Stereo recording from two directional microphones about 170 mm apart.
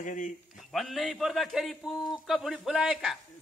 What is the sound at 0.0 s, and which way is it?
Speech, 50° left (ahead or behind).